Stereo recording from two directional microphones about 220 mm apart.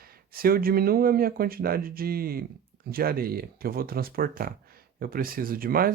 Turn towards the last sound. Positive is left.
turn(degrees=-40)  # may be behind; listen again after turning